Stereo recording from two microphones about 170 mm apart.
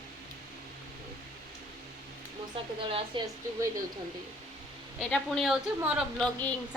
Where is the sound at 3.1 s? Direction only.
30° right (ahead or behind).